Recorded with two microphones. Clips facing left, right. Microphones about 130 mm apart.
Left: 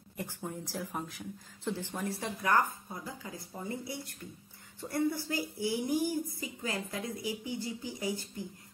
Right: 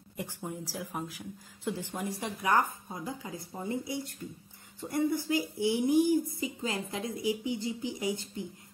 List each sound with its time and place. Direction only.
0.2 s speech: 15° right (ahead or behind)